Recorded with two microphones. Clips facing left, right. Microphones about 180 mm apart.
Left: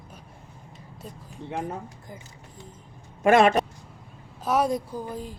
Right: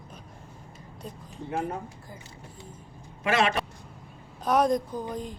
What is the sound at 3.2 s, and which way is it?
Speech, 50° left (ahead or behind).